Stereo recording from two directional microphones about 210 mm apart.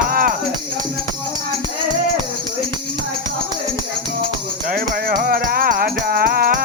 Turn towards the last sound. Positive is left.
turn(degrees=-45)  # may be behind; listen again after turning